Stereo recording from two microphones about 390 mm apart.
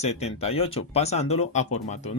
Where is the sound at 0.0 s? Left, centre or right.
Centre.